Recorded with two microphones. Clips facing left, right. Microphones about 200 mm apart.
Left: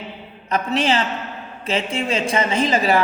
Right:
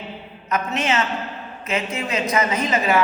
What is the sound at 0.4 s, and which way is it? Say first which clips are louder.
A woman's voice: left 3 dB; 35° left (ahead or behind).